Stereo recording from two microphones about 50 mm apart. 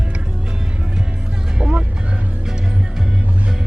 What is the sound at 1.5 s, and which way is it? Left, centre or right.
Music, centre.